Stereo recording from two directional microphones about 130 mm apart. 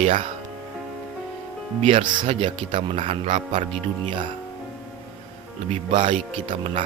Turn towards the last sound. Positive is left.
turn(degrees=-45)  # may be behind; listen again after turning